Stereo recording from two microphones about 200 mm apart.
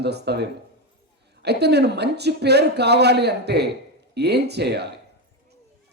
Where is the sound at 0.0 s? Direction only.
55° right (ahead or behind).